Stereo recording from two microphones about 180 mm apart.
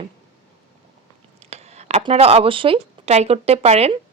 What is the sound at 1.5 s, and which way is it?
Speech, 35° right (ahead or behind).